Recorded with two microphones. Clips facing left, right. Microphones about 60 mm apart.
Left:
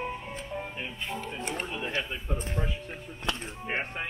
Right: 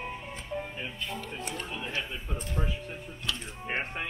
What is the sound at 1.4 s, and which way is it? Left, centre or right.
Speech, left.